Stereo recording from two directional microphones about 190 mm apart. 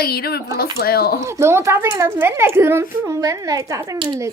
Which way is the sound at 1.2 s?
15° right (ahead or behind).